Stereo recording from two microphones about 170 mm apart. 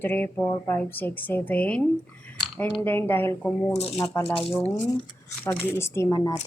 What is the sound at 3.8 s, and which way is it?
Speech, 35° left (ahead or behind).